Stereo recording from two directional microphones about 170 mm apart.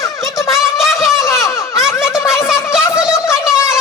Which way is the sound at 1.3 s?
20° left (ahead or behind).